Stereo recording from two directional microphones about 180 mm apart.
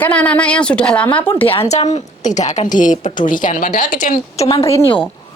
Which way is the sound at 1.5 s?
35° left (ahead or behind).